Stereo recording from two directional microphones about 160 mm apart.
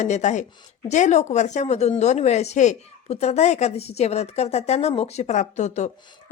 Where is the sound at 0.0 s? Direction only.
50° left (ahead or behind).